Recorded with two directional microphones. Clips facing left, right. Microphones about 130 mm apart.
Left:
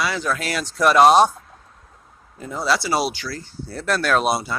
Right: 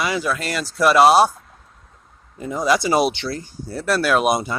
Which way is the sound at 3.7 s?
10° right (ahead or behind).